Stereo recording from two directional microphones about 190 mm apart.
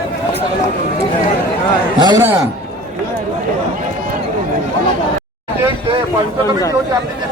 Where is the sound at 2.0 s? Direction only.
25° right (ahead or behind).